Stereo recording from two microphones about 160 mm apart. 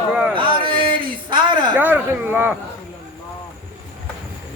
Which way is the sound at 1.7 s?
10° right (ahead or behind).